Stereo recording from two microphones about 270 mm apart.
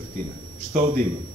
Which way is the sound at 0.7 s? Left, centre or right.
Right.